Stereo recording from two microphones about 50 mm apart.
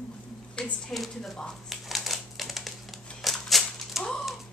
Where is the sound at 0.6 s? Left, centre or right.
Centre.